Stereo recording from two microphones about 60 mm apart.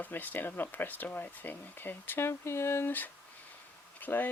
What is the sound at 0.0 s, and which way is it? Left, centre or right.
Speech, left.